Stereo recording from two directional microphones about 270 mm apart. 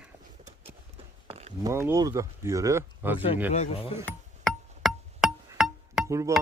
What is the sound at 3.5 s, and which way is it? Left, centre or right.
Speech, left.